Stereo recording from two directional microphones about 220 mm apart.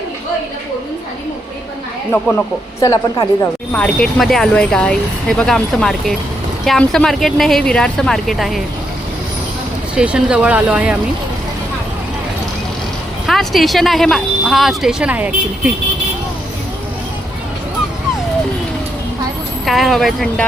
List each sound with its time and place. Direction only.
2.8 s a woman's voice: 15° left (ahead or behind)
3.7 s speech: 5° left (ahead or behind)
9.9 s speech: 5° right (ahead or behind)
13.2 s speech: centre (ahead or behind)
19.6 s speech: centre (ahead or behind)